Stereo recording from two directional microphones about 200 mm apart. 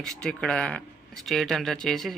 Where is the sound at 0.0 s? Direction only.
5° left (ahead or behind).